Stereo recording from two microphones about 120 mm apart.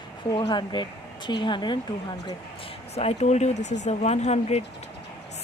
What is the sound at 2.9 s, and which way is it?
Speech, 65° left (ahead or behind).